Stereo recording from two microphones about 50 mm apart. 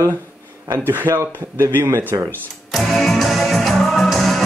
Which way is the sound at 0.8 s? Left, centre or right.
Right.